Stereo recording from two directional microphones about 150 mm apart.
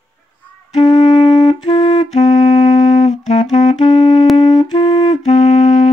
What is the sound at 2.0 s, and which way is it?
Music, 50° left (ahead or behind).